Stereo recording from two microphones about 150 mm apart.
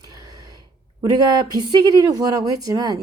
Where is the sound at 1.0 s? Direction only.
30° right (ahead or behind).